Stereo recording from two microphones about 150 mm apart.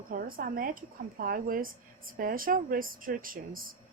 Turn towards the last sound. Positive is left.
turn(degrees=-70)  # may be behind; listen again after turning